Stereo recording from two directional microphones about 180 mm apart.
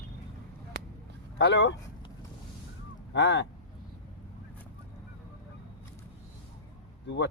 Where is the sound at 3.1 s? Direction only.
90° left.